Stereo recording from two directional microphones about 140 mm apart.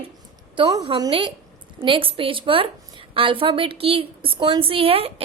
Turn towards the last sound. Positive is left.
turn(degrees=-40)  # may be behind; listen again after turning